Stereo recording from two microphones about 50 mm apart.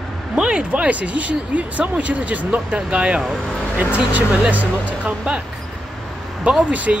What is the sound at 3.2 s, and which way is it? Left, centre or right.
Speech, centre.